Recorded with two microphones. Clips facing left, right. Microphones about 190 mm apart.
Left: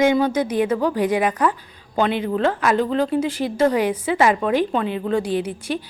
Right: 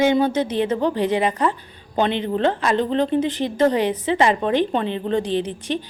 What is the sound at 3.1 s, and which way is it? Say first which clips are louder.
Speech: right 1 dB; 5° left (ahead or behind).